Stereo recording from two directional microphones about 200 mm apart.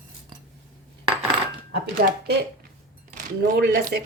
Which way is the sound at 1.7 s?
55° right (ahead or behind).